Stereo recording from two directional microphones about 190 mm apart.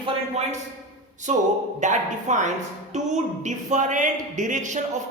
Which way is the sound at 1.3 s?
35° right (ahead or behind).